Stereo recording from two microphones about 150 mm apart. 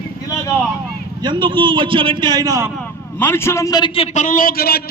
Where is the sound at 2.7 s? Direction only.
10° left (ahead or behind).